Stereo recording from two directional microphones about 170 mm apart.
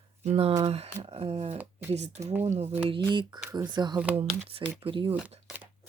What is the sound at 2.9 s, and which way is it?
Speech, 25° right (ahead or behind).